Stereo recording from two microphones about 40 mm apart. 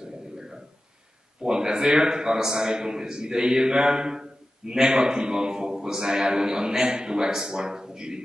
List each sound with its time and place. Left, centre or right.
1.4 s a man's voice: centre